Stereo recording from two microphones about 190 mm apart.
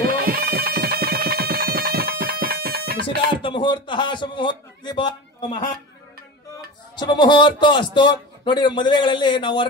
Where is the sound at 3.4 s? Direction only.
25° left (ahead or behind).